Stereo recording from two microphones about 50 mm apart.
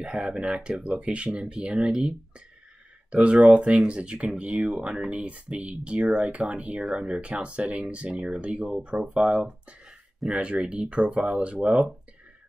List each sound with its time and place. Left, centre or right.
0.0 s speech: centre